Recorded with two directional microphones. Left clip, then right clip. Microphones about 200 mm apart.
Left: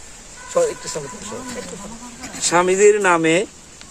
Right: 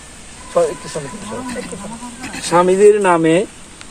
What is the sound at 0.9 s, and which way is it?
Speech, 20° left (ahead or behind).